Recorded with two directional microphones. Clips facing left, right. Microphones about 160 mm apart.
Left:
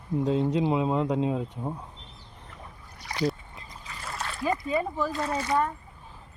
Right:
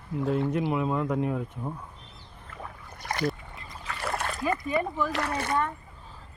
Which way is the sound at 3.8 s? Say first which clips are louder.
Right 6 dB; 60° right (ahead or behind).